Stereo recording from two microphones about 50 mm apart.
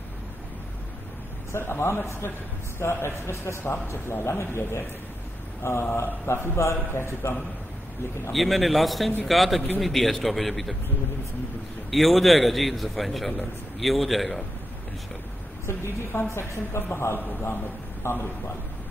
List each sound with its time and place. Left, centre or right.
1.5 s a woman's voice: left
8.3 s a man's voice: centre
11.9 s a man's voice: centre
15.6 s a woman's voice: left
17.2 s a man's voice: left
18.0 s a woman's voice: left